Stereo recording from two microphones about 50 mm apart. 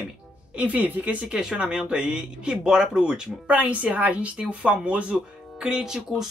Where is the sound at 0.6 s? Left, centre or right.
Right.